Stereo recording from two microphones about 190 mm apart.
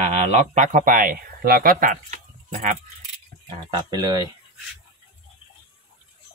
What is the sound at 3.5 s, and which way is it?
Speech, 20° right (ahead or behind).